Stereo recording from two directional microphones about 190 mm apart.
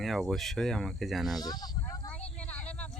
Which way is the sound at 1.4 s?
20° left (ahead or behind).